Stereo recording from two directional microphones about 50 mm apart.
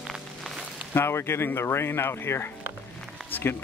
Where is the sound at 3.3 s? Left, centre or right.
Left.